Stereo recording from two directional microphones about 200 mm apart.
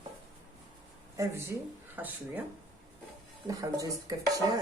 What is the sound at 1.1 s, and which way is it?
Speech, 15° right (ahead or behind).